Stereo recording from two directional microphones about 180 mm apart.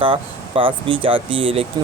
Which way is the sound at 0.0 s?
30° right (ahead or behind).